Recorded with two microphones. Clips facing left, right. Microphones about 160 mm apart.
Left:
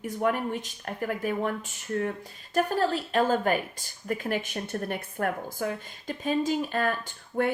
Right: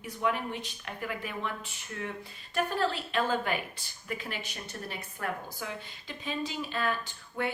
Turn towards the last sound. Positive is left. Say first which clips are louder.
# left 7 dB
turn(degrees=50)  # may be behind; listen again after turning